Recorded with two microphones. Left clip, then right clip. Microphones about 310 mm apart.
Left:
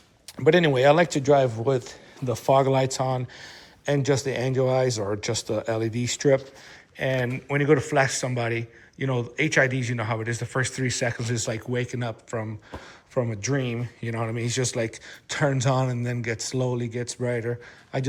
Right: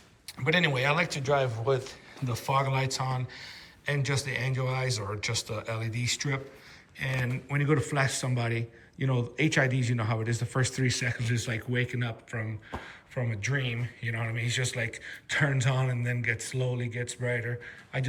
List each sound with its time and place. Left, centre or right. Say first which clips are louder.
0.4 s a man's voice: left 8 dB; centre